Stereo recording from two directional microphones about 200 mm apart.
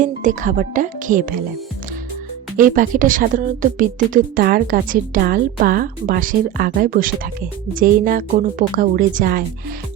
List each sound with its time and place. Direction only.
0.0 s speech: 40° right (ahead or behind)
2.6 s speech: 40° right (ahead or behind)